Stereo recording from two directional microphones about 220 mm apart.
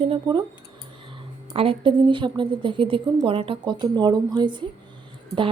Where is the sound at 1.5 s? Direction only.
25° right (ahead or behind).